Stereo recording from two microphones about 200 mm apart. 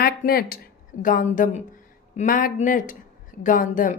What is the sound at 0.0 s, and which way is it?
A woman's voice, 50° left (ahead or behind).